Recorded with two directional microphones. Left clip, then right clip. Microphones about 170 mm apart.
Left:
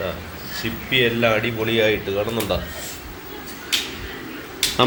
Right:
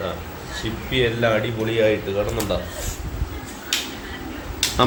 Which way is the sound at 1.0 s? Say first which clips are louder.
Left 1 dB; 20° left (ahead or behind).